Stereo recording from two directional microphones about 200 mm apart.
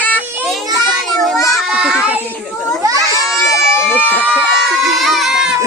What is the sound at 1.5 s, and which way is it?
Children playing, centre (ahead or behind).